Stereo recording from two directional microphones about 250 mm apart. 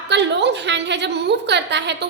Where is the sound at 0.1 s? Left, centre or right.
Right.